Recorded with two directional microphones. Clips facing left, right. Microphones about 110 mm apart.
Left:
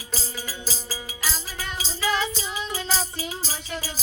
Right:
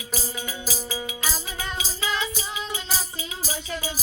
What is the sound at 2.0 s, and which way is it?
Music, 35° left (ahead or behind).